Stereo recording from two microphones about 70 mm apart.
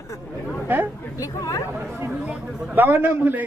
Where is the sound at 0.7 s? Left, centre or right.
Right.